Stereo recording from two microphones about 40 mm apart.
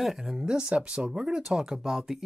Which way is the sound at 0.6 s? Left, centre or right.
Right.